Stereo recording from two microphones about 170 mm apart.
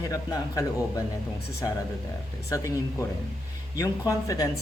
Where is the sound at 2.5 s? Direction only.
20° left (ahead or behind).